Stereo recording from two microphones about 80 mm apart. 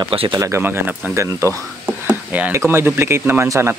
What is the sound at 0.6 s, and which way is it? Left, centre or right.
Speech, right.